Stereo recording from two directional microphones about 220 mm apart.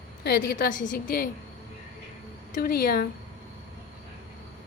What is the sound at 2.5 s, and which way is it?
Speech, 40° left (ahead or behind).